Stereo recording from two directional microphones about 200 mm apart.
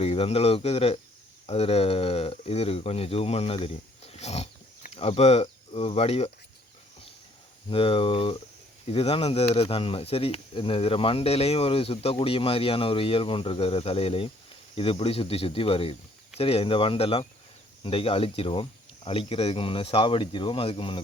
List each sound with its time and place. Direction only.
0.0 s speech: 30° left (ahead or behind)
7.7 s speech: 30° left (ahead or behind)